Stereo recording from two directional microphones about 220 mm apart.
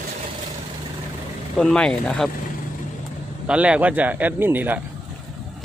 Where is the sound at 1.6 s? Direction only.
5° left (ahead or behind).